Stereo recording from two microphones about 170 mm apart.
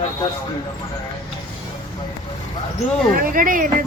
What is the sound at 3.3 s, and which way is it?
Speech, 55° right (ahead or behind).